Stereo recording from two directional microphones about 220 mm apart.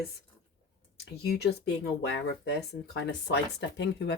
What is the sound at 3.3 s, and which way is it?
Speech, 50° left (ahead or behind).